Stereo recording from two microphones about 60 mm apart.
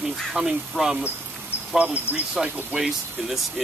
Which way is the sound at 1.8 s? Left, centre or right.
Right.